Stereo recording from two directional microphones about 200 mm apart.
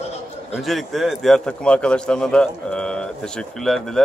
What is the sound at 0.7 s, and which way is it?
A man's voice, centre (ahead or behind).